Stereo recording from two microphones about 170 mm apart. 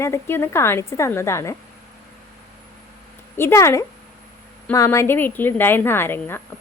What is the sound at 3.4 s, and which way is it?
A woman's voice, 15° left (ahead or behind).